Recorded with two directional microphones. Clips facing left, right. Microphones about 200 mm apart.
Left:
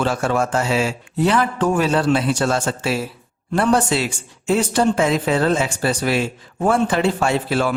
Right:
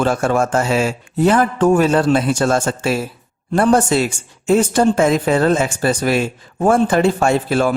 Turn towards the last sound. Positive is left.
turn(degrees=-45)  # may be behind; listen again after turning